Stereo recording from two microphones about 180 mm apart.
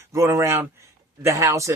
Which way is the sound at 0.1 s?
15° right (ahead or behind).